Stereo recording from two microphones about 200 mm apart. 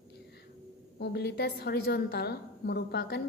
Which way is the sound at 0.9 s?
55° left (ahead or behind).